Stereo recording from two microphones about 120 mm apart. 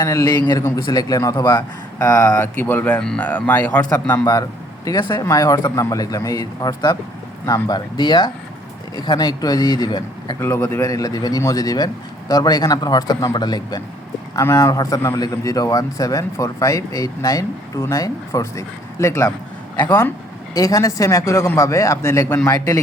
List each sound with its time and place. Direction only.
0.0 s a man's voice: 30° left (ahead or behind)
2.6 s speech: 15° left (ahead or behind)
4.9 s a man's voice: 35° left (ahead or behind)
10.4 s a man's voice: 20° left (ahead or behind)
20.5 s a man's voice: 30° left (ahead or behind)